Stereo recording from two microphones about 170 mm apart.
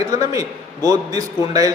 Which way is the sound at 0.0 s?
20° right (ahead or behind).